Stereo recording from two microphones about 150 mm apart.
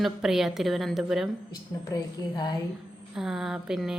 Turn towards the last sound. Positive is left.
turn(degrees=-5)  # may be behind; listen again after turning